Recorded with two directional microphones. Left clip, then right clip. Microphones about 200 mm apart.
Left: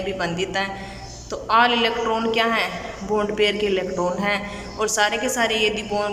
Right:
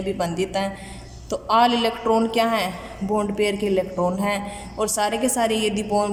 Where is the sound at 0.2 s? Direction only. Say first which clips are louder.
Even; 25° right (ahead or behind).